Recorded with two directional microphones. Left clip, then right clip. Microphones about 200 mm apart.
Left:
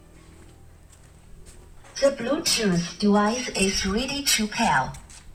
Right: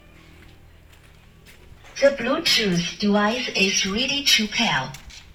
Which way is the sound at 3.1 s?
35° left (ahead or behind).